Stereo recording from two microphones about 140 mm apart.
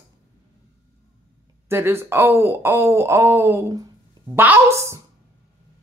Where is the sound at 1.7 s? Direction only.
20° right (ahead or behind).